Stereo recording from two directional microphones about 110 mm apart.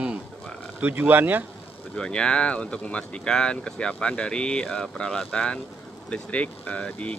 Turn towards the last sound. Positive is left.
turn(degrees=10)  # may be behind; listen again after turning